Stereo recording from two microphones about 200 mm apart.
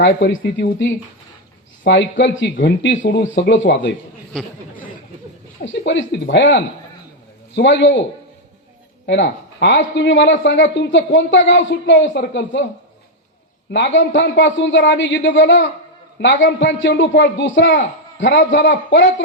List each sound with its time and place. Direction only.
0.0 s a man's voice: 65° left (ahead or behind)
4.3 s speech: 5° left (ahead or behind)
5.6 s a man's voice: 65° left (ahead or behind)
9.0 s speech: 60° left (ahead or behind)
13.7 s a man's voice: 60° left (ahead or behind)